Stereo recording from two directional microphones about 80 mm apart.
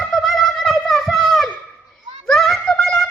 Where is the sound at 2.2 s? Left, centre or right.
Centre.